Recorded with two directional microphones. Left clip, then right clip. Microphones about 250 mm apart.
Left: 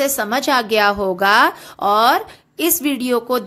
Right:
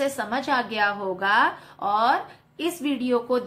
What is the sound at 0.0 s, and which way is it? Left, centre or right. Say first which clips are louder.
A woman's voice: left 8 dB; left.